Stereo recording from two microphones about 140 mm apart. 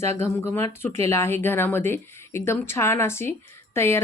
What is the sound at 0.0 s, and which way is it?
Speech, 20° left (ahead or behind).